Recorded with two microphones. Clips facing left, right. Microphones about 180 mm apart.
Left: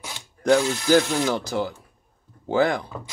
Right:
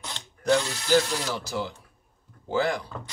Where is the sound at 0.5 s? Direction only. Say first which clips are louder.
Left 4 dB; 50° left (ahead or behind).